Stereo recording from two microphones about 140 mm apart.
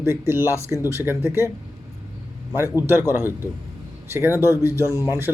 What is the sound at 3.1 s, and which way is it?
Speech, 15° right (ahead or behind).